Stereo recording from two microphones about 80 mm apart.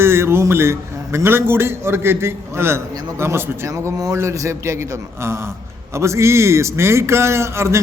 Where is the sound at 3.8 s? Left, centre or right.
Right.